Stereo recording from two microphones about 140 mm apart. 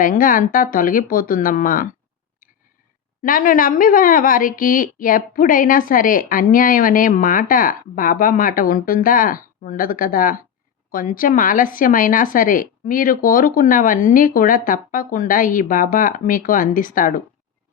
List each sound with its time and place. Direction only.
0.0 s a woman's voice: 75° left (ahead or behind)
3.2 s a woman's voice: 80° left